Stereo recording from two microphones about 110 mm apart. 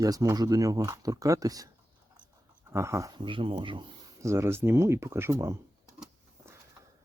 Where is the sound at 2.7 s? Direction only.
25° right (ahead or behind).